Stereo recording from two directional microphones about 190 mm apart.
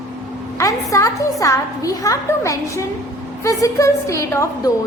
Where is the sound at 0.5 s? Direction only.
15° left (ahead or behind).